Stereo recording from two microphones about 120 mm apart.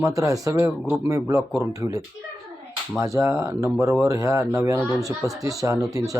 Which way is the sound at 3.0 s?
25° right (ahead or behind).